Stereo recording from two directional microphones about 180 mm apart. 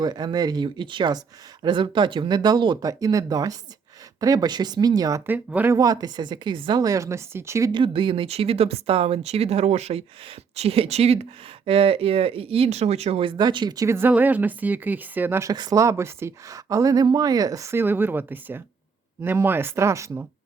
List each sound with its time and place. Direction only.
0.0 s speech: 25° right (ahead or behind)